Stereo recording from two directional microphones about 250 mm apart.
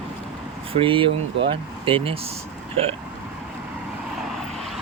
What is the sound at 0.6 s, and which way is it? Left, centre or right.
Speech, right.